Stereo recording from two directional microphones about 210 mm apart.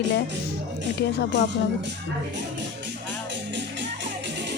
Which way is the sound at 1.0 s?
55° left (ahead or behind).